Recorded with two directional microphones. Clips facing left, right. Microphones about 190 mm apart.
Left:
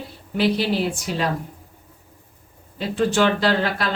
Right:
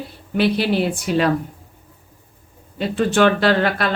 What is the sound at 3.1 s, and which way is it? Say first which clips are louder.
Speech: right 4 dB; 60° right (ahead or behind).